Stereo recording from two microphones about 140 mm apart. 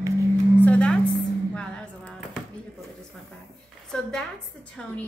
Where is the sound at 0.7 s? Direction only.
10° left (ahead or behind).